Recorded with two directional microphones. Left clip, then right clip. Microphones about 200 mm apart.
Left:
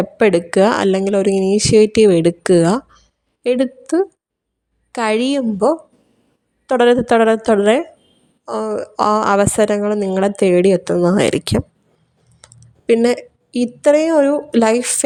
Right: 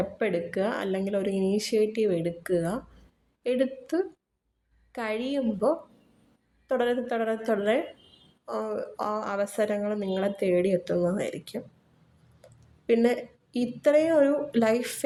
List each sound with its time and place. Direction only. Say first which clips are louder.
0.0 s a woman's voice: left 14 dB; 55° left (ahead or behind)